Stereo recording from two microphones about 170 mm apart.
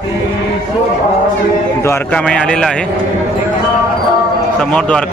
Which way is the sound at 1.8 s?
10° left (ahead or behind).